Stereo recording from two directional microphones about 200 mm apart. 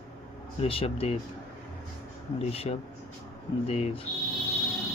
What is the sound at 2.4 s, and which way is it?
Speech, 30° left (ahead or behind).